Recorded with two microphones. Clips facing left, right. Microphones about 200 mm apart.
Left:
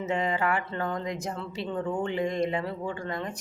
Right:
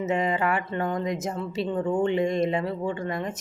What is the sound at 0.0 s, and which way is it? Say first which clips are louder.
Speech: right 3 dB; 20° right (ahead or behind).